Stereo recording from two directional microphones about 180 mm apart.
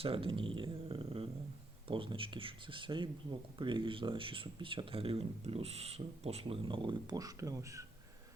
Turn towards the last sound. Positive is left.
turn(degrees=-15)  # may be behind; listen again after turning